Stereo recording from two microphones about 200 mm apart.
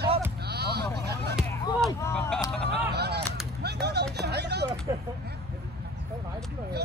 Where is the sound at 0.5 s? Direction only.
55° right (ahead or behind).